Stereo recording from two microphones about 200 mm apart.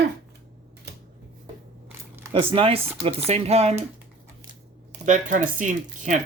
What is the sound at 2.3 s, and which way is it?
Speech, 25° right (ahead or behind).